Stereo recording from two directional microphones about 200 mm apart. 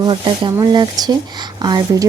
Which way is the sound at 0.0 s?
25° right (ahead or behind).